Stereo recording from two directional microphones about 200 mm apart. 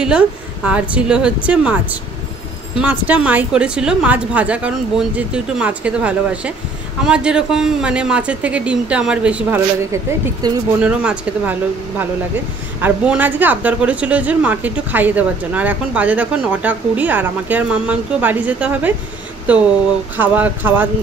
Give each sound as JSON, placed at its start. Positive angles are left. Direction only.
{"t": 0.7, "sound": "a woman's voice", "side_deg": -5}
{"t": 10.4, "sound": "speech", "side_deg": -20}
{"t": 10.8, "sound": "a woman's voice", "side_deg": -5}
{"t": 12.8, "sound": "speech", "side_deg": -5}